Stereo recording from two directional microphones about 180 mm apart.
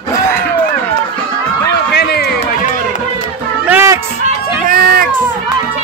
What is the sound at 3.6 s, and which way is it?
Music, 10° right (ahead or behind).